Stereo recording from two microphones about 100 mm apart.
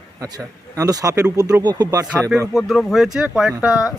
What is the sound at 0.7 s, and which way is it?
Speech, 35° right (ahead or behind).